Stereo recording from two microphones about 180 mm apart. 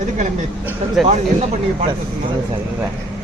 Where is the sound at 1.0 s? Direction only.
Centre (ahead or behind).